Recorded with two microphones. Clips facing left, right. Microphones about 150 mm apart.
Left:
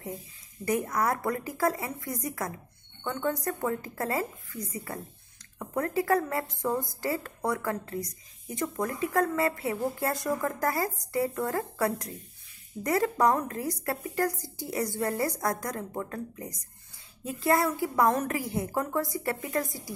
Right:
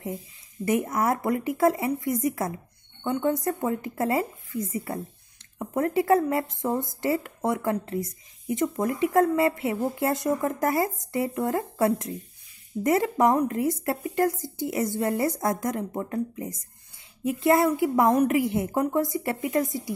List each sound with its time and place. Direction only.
0.7 s speech: 25° right (ahead or behind)